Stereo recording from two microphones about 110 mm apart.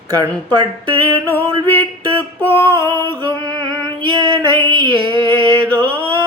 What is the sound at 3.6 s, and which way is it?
Music, 40° right (ahead or behind).